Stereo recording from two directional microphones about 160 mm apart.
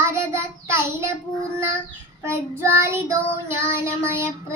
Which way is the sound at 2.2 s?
15° right (ahead or behind).